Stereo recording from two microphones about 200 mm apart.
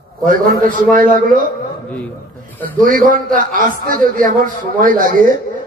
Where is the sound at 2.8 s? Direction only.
45° right (ahead or behind).